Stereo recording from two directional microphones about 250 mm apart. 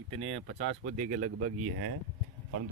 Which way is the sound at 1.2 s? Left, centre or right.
Right.